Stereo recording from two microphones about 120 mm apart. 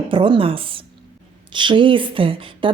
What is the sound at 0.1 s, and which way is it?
A woman's voice, 45° right (ahead or behind).